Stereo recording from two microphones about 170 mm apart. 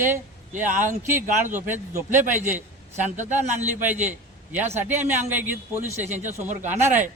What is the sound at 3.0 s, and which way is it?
Speech, 45° right (ahead or behind).